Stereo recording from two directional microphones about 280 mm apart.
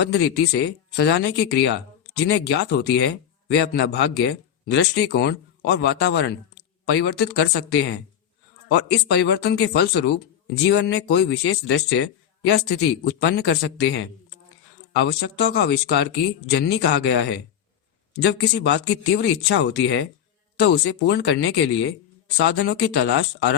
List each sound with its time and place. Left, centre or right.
0.0 s speech: left